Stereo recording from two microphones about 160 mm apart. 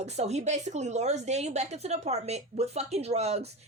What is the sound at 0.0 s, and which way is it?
A woman's voice, 45° right (ahead or behind).